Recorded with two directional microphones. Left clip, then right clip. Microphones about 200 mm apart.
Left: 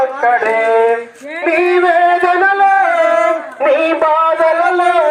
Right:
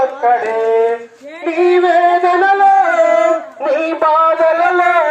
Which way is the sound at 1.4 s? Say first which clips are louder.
Even; centre (ahead or behind).